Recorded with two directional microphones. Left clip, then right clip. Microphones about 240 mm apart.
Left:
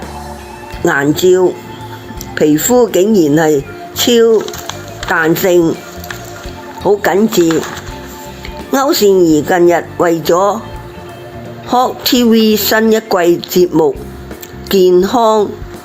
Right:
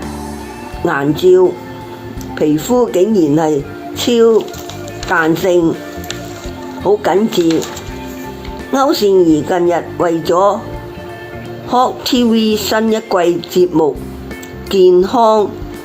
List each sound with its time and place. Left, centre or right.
0.9 s a woman's voice: left
6.8 s a woman's voice: left
8.7 s a woman's voice: left
11.7 s a woman's voice: left